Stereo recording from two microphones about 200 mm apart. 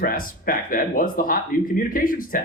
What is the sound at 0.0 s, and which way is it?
Speech, 45° left (ahead or behind).